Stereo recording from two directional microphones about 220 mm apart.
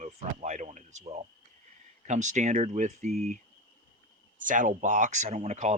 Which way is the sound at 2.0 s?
35° right (ahead or behind).